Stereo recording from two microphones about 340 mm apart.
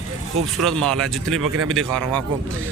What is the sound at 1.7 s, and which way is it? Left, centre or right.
Speech, centre.